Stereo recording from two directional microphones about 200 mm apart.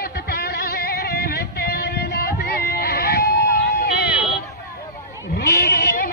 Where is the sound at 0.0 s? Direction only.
55° left (ahead or behind).